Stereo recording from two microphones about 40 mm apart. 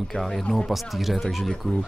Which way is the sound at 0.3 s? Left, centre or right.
Centre.